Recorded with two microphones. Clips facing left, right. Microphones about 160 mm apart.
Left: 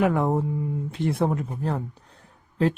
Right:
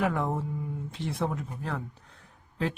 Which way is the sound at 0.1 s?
50° left (ahead or behind).